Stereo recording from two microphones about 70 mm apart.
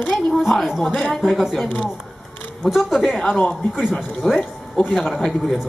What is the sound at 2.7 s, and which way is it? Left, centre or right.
Speech, centre.